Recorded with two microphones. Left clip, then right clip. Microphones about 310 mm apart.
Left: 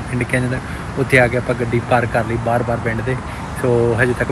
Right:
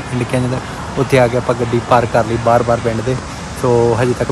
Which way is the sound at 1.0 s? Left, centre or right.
Centre.